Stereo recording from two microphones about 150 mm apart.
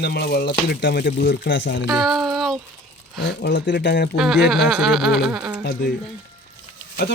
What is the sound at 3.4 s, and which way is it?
Speech, 90° left.